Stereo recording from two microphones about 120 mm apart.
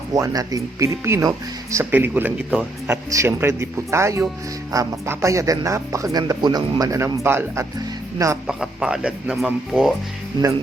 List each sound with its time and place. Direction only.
0.1 s speech: 30° right (ahead or behind)
1.8 s speech: 15° right (ahead or behind)
3.1 s speech: 25° right (ahead or behind)
8.4 s speech: 5° right (ahead or behind)